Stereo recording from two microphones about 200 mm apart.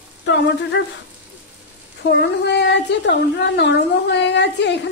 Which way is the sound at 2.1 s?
60° left (ahead or behind).